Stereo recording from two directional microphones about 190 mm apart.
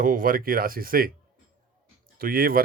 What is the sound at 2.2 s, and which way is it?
Speech, 50° right (ahead or behind).